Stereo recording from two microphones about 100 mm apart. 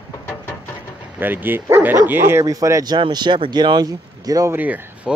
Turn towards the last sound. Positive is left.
turn(degrees=-15)  # may be behind; listen again after turning